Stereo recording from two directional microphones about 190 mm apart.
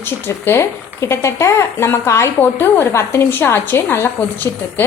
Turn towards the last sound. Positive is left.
turn(degrees=10)  # may be behind; listen again after turning